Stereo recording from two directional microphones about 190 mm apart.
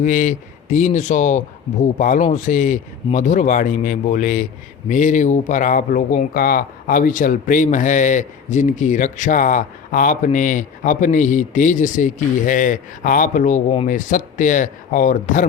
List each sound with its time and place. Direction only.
0.0 s speech: 40° left (ahead or behind)